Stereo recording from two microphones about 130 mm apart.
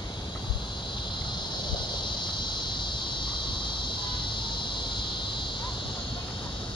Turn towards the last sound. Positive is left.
turn(degrees=40)  # may be behind; listen again after turning